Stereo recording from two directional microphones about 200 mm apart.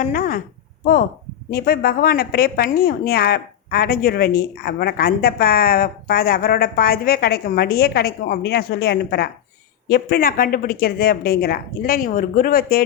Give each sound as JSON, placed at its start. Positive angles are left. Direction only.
{"t": 0.0, "sound": "a woman's voice", "side_deg": 45}
{"t": 1.5, "sound": "a woman's voice", "side_deg": 50}